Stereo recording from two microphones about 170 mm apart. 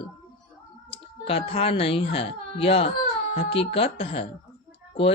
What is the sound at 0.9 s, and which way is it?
Speech, 30° left (ahead or behind).